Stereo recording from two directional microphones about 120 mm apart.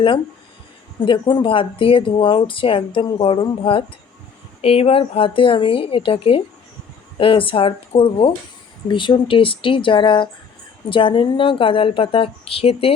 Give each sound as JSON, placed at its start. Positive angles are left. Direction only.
{"t": 1.0, "sound": "speech", "side_deg": 45}